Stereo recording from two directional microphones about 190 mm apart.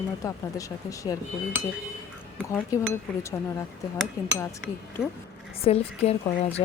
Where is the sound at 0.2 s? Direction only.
15° left (ahead or behind).